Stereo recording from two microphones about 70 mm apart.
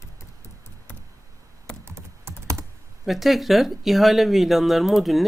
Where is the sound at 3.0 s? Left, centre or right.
Centre.